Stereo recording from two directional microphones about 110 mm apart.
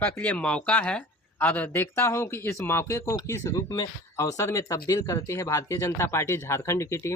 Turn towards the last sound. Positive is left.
turn(degrees=25)  # may be behind; listen again after turning